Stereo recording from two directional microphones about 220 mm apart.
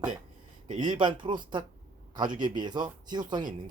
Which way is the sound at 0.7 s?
20° right (ahead or behind).